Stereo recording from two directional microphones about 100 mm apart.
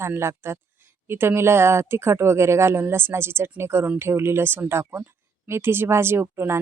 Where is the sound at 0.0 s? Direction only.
25° right (ahead or behind).